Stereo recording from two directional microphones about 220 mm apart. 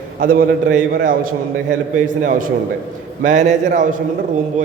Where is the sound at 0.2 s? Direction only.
40° right (ahead or behind).